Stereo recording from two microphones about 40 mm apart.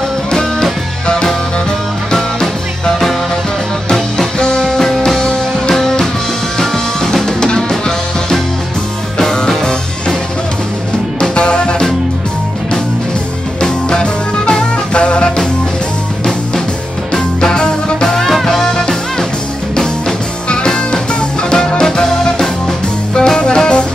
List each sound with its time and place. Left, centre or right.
0.3 s music: centre
4.4 s music: left
4.6 s music: centre
5.2 s music: left
9.2 s music: centre
11.1 s music: left
13.6 s music: left
17.1 s music: centre
23.1 s jazz: centre